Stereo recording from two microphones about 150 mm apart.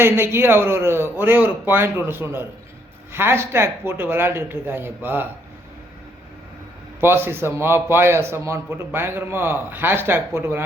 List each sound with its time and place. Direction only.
0.0 s a man's voice: 15° right (ahead or behind)
7.0 s a man's voice: 15° right (ahead or behind)